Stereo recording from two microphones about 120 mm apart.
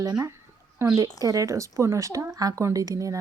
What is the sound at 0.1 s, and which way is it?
Speech, 20° right (ahead or behind).